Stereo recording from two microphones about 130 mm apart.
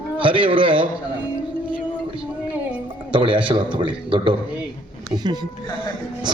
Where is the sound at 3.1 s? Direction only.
40° right (ahead or behind).